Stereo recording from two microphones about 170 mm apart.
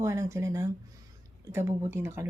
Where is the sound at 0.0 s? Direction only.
15° right (ahead or behind).